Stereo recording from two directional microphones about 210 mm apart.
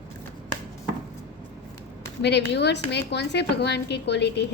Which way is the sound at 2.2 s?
55° left (ahead or behind).